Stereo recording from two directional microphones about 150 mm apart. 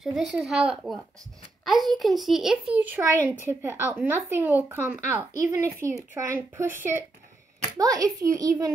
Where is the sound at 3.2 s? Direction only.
15° right (ahead or behind).